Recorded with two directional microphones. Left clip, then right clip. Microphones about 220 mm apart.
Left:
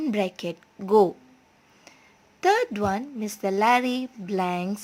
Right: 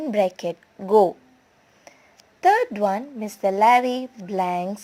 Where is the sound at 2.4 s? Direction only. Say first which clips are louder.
Right 4 dB; 15° left (ahead or behind).